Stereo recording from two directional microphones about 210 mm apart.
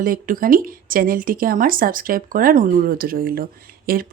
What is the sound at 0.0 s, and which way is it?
Speech, 40° right (ahead or behind).